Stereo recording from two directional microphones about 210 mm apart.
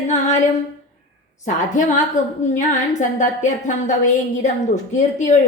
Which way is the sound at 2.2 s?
35° left (ahead or behind).